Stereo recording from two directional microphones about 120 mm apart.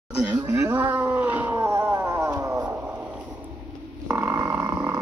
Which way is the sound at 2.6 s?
15° right (ahead or behind).